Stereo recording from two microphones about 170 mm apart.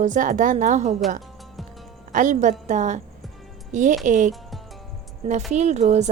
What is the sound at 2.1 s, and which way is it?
Speech, 50° right (ahead or behind).